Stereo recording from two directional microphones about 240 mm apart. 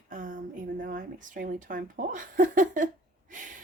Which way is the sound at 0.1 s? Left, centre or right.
Right.